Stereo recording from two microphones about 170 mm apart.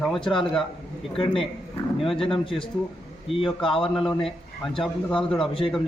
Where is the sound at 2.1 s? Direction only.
30° left (ahead or behind).